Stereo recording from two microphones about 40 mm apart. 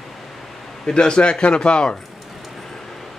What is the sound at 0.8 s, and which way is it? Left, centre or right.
Speech, left.